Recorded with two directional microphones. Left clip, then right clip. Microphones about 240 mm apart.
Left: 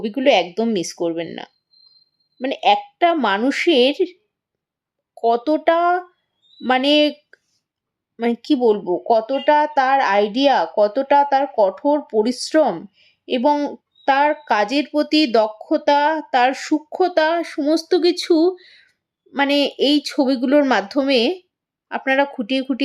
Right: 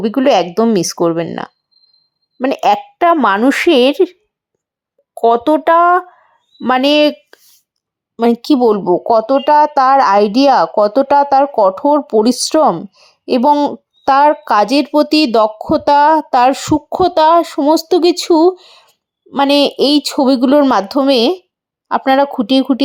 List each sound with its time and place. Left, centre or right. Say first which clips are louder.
0.1 s speech: right 3 dB; right
5.2 s speech: right 6 dB; right